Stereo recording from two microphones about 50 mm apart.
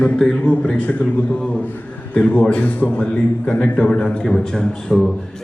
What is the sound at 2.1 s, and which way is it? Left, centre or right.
A man's voice, left.